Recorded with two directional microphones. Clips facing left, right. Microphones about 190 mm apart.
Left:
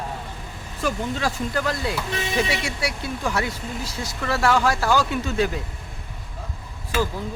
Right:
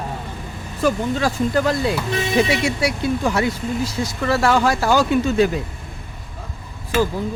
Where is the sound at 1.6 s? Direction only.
20° right (ahead or behind).